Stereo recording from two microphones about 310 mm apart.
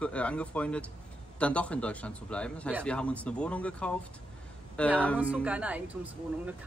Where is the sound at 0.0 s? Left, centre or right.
Centre.